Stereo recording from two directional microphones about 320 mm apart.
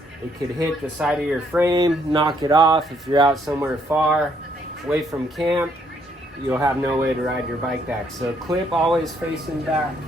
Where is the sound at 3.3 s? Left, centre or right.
Centre.